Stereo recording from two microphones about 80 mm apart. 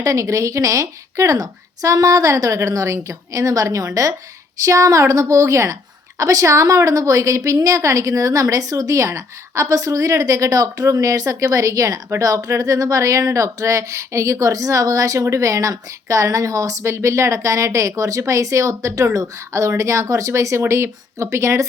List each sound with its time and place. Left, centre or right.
0.0 s a woman's voice: right